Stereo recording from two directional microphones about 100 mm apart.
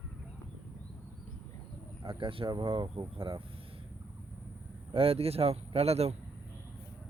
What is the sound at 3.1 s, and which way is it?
Speech, 60° right (ahead or behind).